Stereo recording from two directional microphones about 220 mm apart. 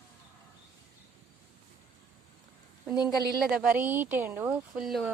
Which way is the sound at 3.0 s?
15° left (ahead or behind).